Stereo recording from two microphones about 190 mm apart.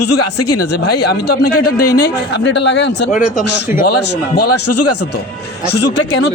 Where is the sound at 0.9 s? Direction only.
55° left (ahead or behind).